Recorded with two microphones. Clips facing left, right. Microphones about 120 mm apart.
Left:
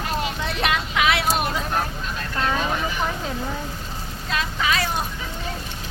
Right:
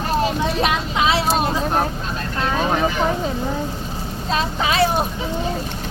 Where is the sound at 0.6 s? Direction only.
25° right (ahead or behind).